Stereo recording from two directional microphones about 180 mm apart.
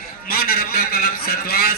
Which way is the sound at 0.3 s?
55° left (ahead or behind).